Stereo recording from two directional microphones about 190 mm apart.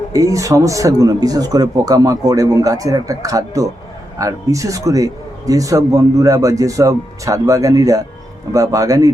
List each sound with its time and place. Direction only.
0.1 s speech: 15° right (ahead or behind)